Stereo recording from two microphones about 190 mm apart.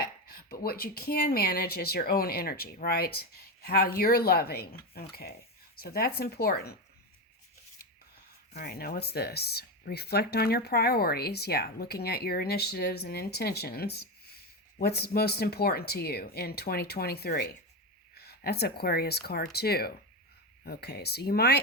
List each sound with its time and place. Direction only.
0.0 s speech: 50° left (ahead or behind)
8.5 s speech: 55° left (ahead or behind)